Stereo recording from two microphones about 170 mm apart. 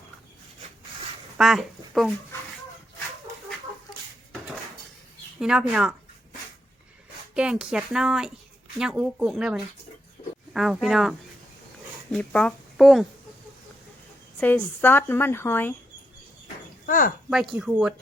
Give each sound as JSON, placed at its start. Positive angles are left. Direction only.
{"t": 1.4, "sound": "speech", "side_deg": 0}
{"t": 5.4, "sound": "speech", "side_deg": -5}
{"t": 7.3, "sound": "speech", "side_deg": -5}
{"t": 12.1, "sound": "speech", "side_deg": 5}
{"t": 14.3, "sound": "a woman's voice", "side_deg": 10}
{"t": 16.8, "sound": "speech", "side_deg": 55}
{"t": 17.2, "sound": "speech", "side_deg": -5}